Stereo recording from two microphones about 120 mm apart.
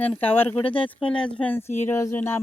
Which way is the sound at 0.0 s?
15° left (ahead or behind).